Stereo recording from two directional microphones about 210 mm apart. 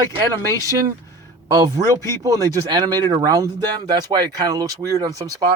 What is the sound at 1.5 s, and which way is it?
Speech, 20° right (ahead or behind).